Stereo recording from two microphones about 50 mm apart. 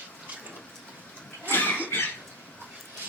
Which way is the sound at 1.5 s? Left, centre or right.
Left.